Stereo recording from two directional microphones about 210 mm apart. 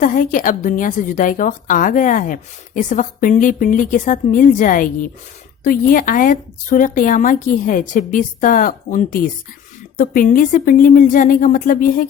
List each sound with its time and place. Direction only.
0.0 s a woman's voice: 40° left (ahead or behind)